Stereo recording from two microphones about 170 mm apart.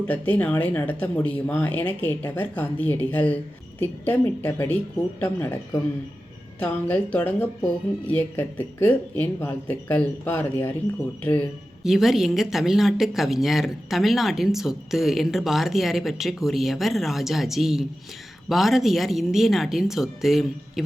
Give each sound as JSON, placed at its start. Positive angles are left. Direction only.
{"t": 0.1, "sound": "speech", "side_deg": 10}
{"t": 11.8, "sound": "speech", "side_deg": 0}